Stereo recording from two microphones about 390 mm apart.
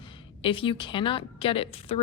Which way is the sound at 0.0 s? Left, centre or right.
Centre.